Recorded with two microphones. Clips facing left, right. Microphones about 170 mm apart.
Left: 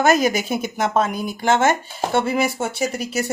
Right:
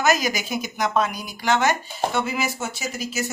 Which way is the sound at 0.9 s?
50° left (ahead or behind).